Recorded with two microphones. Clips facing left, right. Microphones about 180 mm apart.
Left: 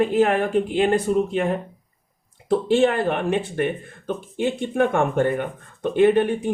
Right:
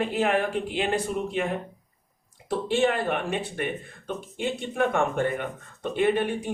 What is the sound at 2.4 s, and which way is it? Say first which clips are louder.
Speech: left 6 dB; 50° left (ahead or behind).